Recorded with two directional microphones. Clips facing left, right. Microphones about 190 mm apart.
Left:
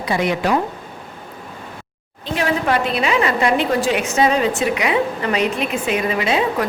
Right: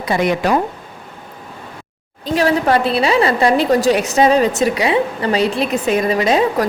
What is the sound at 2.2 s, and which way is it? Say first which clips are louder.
A woman's voice: right 5 dB; 35° right (ahead or behind).